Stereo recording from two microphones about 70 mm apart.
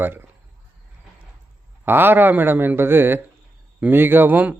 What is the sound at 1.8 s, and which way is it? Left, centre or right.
A man's voice, right.